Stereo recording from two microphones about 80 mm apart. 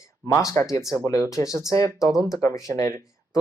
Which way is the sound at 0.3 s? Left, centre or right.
Left.